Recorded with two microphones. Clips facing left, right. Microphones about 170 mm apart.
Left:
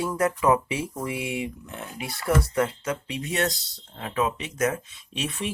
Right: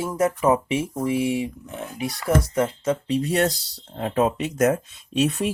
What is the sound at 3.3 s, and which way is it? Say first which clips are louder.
Speech: right 5 dB; 40° right (ahead or behind).